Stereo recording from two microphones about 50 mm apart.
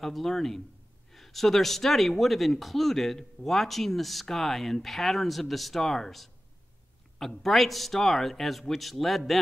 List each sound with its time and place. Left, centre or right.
0.0 s speech: centre